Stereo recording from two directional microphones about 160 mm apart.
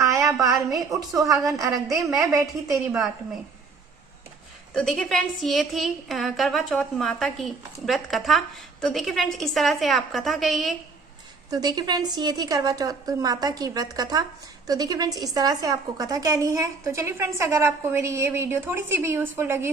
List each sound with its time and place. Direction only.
0.0 s a woman's voice: 20° right (ahead or behind)
2.4 s a woman's voice: centre (ahead or behind)
4.7 s a woman's voice: 5° left (ahead or behind)
11.5 s a woman's voice: 25° right (ahead or behind)